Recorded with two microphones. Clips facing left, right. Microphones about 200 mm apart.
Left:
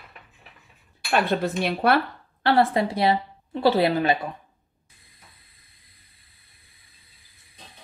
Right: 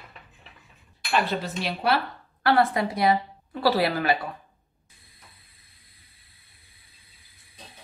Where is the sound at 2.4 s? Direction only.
25° left (ahead or behind).